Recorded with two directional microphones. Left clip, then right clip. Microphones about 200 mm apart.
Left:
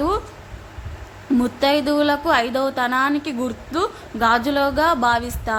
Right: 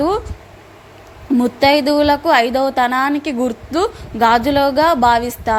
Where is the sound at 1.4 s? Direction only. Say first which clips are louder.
Right 6 dB; 20° right (ahead or behind).